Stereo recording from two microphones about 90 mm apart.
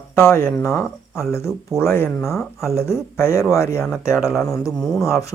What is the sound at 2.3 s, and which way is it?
Speech, centre (ahead or behind).